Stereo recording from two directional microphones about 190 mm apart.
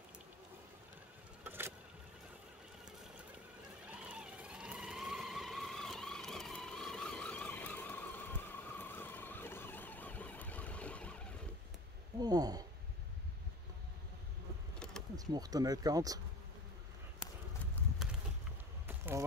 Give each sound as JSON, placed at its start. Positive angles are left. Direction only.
{"t": 1.4, "sound": "vehicle", "side_deg": -10}
{"t": 3.8, "sound": "vehicle", "side_deg": -5}
{"t": 12.2, "sound": "speech", "side_deg": -20}
{"t": 15.1, "sound": "speech", "side_deg": -20}
{"t": 18.9, "sound": "a sound", "side_deg": -10}